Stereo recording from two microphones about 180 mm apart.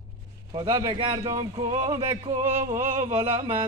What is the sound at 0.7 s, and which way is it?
Speech, 20° right (ahead or behind).